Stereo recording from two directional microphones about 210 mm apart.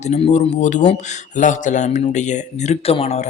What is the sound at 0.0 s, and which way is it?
A man's voice, 30° left (ahead or behind).